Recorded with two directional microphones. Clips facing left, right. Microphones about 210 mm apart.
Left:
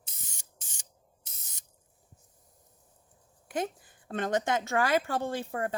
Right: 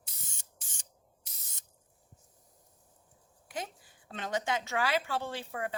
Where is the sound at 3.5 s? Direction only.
50° left (ahead or behind).